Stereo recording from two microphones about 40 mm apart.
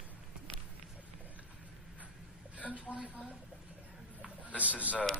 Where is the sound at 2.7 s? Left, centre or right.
Right.